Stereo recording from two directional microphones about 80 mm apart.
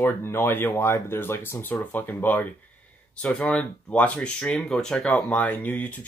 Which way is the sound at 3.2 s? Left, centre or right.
Centre.